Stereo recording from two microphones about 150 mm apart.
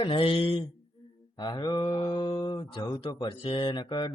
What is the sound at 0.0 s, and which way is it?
Speech, 35° left (ahead or behind).